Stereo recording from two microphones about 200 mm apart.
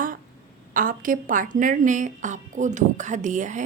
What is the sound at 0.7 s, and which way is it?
A woman's voice, 45° right (ahead or behind).